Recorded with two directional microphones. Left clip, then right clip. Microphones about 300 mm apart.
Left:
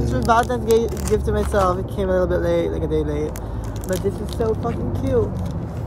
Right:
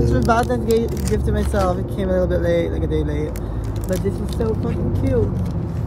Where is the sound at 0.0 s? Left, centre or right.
Centre.